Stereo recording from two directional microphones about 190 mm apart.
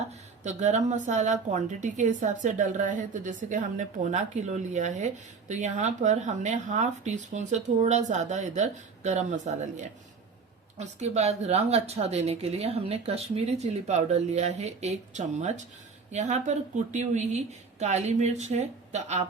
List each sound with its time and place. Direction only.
0.4 s a woman's voice: 40° right (ahead or behind)